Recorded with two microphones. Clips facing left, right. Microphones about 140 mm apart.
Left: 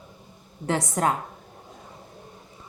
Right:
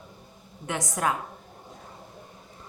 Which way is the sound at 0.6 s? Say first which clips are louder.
Left 4 dB; 30° left (ahead or behind).